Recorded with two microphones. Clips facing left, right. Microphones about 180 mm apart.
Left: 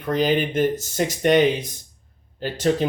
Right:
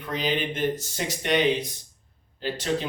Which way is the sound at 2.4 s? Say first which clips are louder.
Left 6 dB; 45° left (ahead or behind).